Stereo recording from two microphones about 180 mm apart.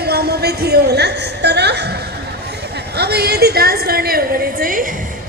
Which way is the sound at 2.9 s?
65° right (ahead or behind).